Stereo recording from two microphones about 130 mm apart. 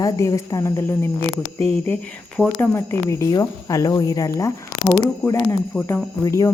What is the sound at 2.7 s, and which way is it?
Speech, 20° left (ahead or behind).